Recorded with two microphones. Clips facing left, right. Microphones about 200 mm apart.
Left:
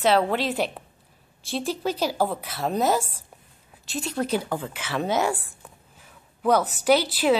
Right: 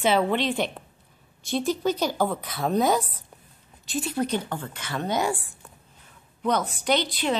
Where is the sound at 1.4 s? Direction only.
30° left (ahead or behind).